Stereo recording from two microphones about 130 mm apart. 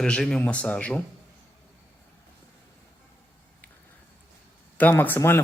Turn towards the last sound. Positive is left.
turn(degrees=15)  # may be behind; listen again after turning